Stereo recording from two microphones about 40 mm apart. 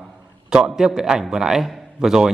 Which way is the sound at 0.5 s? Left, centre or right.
Centre.